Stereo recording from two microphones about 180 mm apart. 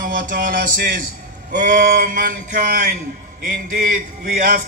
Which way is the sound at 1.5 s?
65° right (ahead or behind).